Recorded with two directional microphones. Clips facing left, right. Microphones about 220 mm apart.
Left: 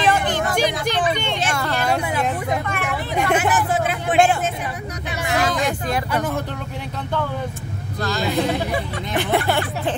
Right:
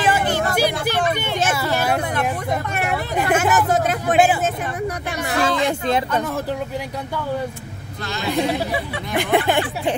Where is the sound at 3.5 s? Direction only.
40° right (ahead or behind).